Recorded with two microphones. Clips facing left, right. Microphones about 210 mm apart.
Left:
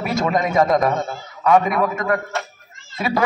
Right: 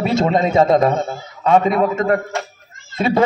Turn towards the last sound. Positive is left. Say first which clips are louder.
# right 5 dB
turn(degrees=-25)  # may be behind; listen again after turning